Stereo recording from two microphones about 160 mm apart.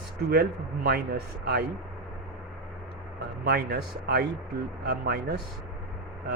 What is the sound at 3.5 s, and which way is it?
A man's voice, 80° right.